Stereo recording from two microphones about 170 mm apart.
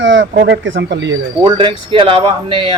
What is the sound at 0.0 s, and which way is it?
Speech, 90° right.